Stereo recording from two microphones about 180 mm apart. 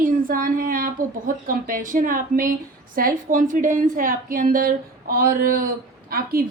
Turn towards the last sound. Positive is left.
turn(degrees=-55)  # may be behind; listen again after turning